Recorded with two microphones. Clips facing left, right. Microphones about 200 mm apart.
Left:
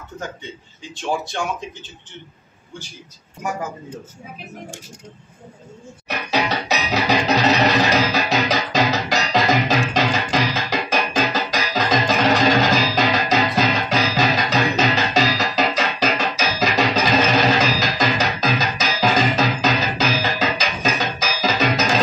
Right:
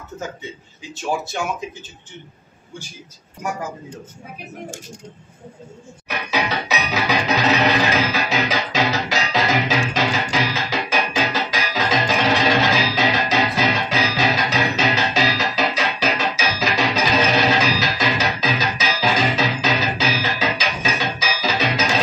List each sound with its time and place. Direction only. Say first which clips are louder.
0.9 s speech: even; 5° right (ahead or behind)
7.1 s music: left 2 dB; 40° left (ahead or behind)